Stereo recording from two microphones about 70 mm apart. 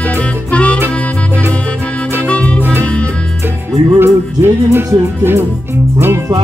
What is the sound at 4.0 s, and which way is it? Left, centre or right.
Music, right.